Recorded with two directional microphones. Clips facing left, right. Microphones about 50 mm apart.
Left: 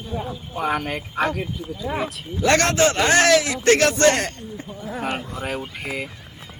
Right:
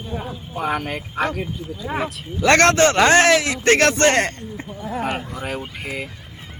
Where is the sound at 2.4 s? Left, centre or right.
Right.